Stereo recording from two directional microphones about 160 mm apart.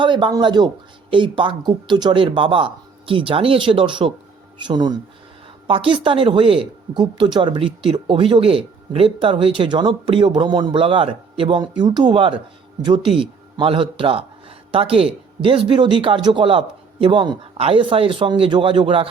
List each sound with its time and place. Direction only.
0.0 s a man's voice: 30° right (ahead or behind)